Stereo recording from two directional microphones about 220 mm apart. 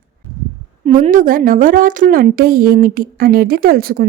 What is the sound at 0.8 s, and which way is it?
A woman's voice, 35° right (ahead or behind).